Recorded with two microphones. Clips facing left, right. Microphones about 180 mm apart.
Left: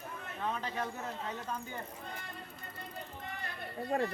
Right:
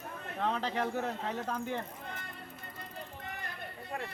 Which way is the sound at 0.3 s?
70° right (ahead or behind).